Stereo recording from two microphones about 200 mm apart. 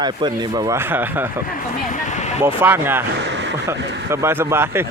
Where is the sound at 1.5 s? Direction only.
40° left (ahead or behind).